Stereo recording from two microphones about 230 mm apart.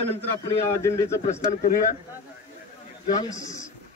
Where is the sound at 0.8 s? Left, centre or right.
Centre.